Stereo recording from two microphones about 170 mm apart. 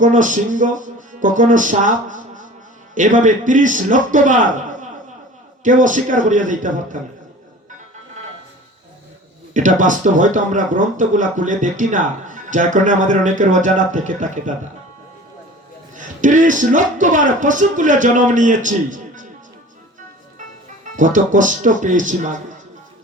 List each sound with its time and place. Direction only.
0.0 s speech: 50° right (ahead or behind)
5.6 s speech: 50° right (ahead or behind)
9.6 s speech: 50° right (ahead or behind)
16.0 s speech: 50° right (ahead or behind)
20.9 s speech: 50° right (ahead or behind)